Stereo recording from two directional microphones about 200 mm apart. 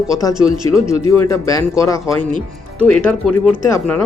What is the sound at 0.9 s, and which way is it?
Speech, 15° left (ahead or behind).